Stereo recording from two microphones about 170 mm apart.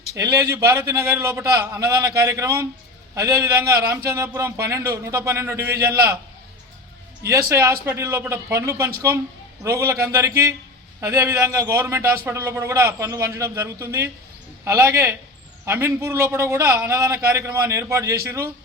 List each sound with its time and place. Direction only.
0.1 s a man's voice: 20° right (ahead or behind)
7.2 s a man's voice: 20° right (ahead or behind)